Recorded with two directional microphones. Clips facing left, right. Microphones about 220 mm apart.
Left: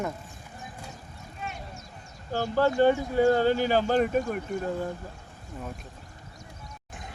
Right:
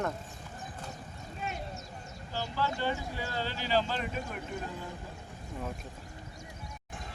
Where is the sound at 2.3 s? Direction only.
50° left (ahead or behind).